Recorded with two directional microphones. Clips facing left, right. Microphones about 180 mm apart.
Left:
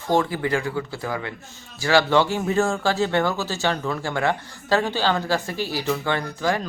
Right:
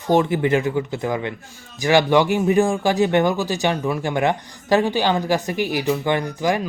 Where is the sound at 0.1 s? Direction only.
20° right (ahead or behind).